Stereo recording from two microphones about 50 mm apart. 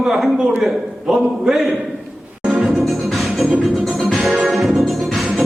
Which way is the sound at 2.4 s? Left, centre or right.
Centre.